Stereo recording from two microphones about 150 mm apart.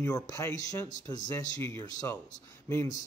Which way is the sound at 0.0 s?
20° left (ahead or behind).